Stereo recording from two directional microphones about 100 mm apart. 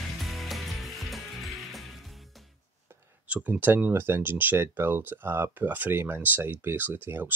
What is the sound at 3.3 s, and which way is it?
Speech, 15° right (ahead or behind).